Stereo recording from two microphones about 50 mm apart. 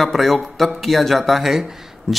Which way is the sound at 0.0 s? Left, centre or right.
Centre.